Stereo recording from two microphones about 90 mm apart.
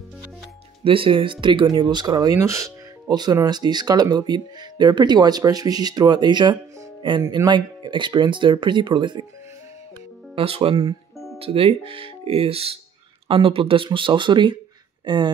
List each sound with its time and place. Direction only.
0.8 s speech: 80° right; by 2.7 s 35° right (ahead or behind)
3.1 s speech: 50° right (ahead or behind)
10.3 s speech: 90° right; by 11.0 s 70° right (ahead or behind)
11.3 s speech: 90° right
13.3 s speech: 80° right
13.8 s speech: 65° right (ahead or behind)